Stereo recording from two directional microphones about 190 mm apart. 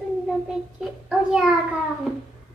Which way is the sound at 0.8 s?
5° right (ahead or behind).